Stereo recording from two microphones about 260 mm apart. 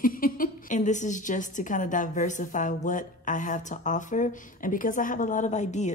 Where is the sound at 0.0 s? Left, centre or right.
Left.